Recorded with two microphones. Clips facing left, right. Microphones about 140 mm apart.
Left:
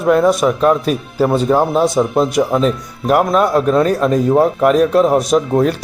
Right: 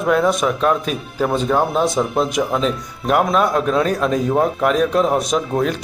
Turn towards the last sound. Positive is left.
turn(degrees=5)  # may be behind; listen again after turning